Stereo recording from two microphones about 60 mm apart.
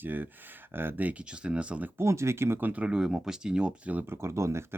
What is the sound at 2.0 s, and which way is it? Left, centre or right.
Speech, right.